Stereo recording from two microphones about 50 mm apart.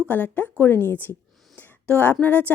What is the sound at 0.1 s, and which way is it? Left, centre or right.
A woman's voice, left.